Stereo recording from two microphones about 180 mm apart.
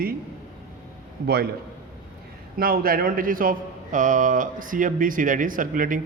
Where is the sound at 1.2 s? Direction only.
60° right (ahead or behind).